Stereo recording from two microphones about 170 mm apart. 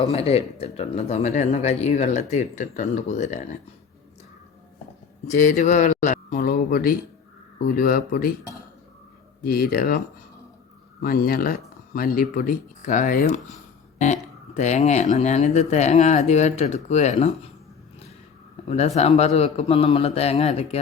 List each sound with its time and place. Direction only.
0.1 s speech: 35° left (ahead or behind)
5.3 s speech: 50° left (ahead or behind)
9.4 s speech: 60° left (ahead or behind)
11.0 s speech: 60° left (ahead or behind); by 17.3 s 40° left (ahead or behind)
18.7 s speech: 40° left (ahead or behind)